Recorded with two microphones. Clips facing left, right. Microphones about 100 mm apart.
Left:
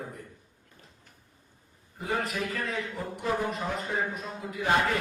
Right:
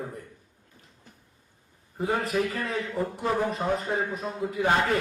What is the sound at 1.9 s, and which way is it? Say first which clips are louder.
A man's voice: right 5 dB; 35° right (ahead or behind).